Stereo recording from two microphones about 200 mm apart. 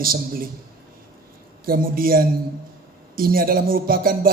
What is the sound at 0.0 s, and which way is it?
Speech, 45° right (ahead or behind).